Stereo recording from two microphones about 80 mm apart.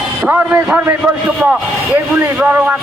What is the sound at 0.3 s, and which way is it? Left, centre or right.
Speech, centre.